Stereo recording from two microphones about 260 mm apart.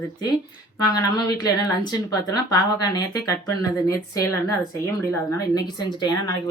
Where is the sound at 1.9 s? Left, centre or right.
Centre.